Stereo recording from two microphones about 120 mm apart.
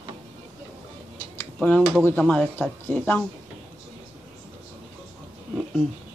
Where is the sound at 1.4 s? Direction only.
15° left (ahead or behind).